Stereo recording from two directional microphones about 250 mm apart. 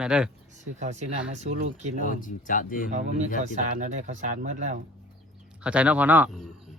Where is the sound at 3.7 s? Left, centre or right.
Right.